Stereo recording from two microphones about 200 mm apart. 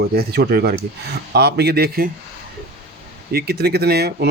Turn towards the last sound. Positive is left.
turn(degrees=-55)  # may be behind; listen again after turning